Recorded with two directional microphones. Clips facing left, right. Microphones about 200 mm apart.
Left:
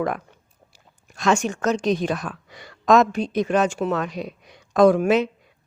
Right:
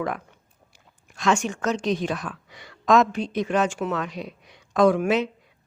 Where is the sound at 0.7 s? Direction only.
40° left (ahead or behind).